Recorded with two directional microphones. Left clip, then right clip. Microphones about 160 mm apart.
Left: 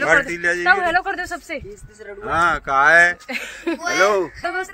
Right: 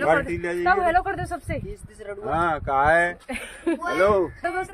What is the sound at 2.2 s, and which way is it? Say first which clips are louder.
Speech: left 5 dB; 20° right (ahead or behind).